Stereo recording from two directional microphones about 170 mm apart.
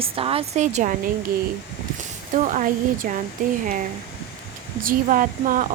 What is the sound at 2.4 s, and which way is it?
Speech, 50° right (ahead or behind).